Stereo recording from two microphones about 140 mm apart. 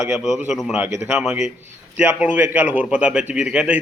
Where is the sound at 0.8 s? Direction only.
20° right (ahead or behind).